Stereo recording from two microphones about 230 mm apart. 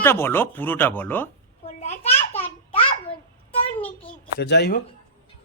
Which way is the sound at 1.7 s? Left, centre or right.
Left.